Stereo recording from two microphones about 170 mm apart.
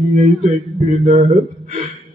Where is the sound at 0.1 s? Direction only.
45° right (ahead or behind).